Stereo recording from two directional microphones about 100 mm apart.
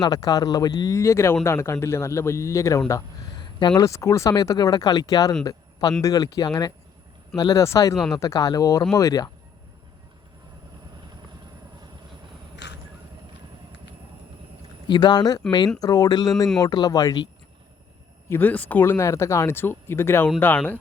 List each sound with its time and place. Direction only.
0.0 s speech: 40° left (ahead or behind)
3.3 s a sound: 50° left (ahead or behind)
3.8 s speech: 30° left (ahead or behind)
14.8 s speech: 45° left (ahead or behind)
18.3 s speech: 20° left (ahead or behind)